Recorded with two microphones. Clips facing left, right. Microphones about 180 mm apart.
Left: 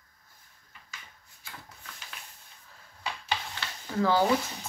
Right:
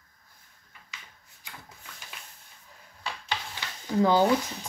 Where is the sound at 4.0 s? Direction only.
20° right (ahead or behind).